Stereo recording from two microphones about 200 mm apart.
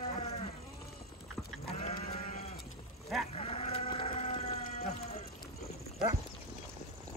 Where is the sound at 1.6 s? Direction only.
30° left (ahead or behind).